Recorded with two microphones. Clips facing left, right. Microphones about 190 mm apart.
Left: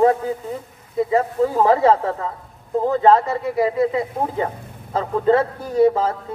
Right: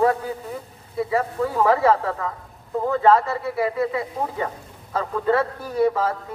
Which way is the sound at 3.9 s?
30° left (ahead or behind).